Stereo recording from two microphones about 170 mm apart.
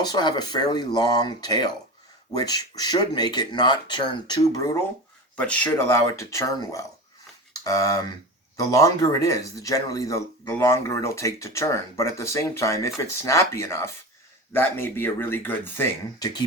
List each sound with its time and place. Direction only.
0.0 s speech: 25° left (ahead or behind)
5.4 s speech: 10° left (ahead or behind)